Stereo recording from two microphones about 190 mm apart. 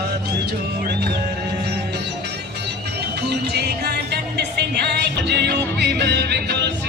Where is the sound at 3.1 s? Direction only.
60° right (ahead or behind).